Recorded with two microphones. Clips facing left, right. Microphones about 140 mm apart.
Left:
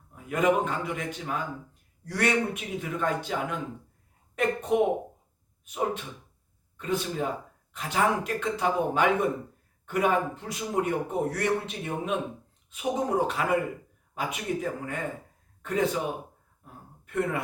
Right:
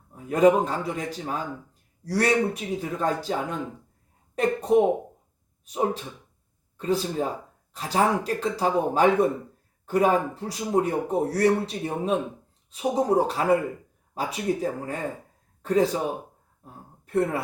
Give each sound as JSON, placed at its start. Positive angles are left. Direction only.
{"t": 0.1, "sound": "a man's voice", "side_deg": -35}
{"t": 4.4, "sound": "a man's voice", "side_deg": -35}
{"t": 16.6, "sound": "a sound", "side_deg": -35}